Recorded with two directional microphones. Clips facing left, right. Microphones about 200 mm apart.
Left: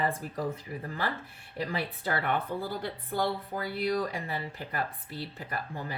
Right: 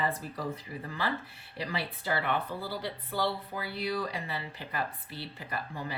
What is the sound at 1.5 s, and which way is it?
Speech, 45° left (ahead or behind).